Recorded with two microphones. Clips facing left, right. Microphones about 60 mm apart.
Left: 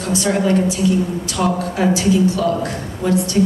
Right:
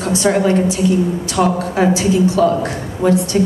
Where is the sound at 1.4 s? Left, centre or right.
Right.